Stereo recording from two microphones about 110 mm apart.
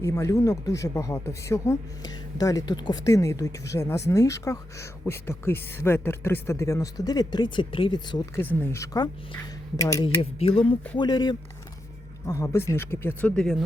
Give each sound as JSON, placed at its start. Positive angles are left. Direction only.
{"t": 0.0, "sound": "speech", "side_deg": 25}
{"t": 8.4, "sound": "speech", "side_deg": 20}
{"t": 10.2, "sound": "speech", "side_deg": 60}
{"t": 12.2, "sound": "speech", "side_deg": 25}
{"t": 13.3, "sound": "speech", "side_deg": 0}